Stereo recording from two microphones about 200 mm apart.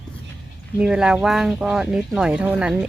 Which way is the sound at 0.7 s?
5° right (ahead or behind).